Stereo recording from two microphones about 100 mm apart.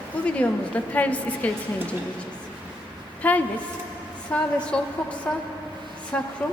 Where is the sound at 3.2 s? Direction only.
15° left (ahead or behind).